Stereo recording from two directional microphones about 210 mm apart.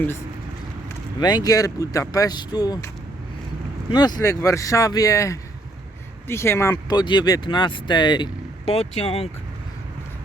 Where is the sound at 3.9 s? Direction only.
20° left (ahead or behind).